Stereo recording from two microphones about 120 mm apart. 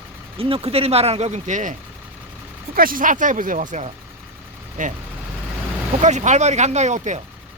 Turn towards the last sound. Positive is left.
turn(degrees=-75)  # may be behind; listen again after turning